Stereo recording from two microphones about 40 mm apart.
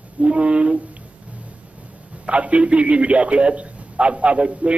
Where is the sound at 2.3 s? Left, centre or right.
Right.